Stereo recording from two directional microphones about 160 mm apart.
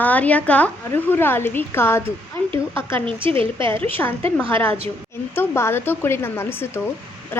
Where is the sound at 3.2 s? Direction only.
35° right (ahead or behind).